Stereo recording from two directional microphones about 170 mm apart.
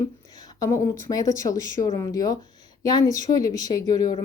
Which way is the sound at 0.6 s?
15° left (ahead or behind).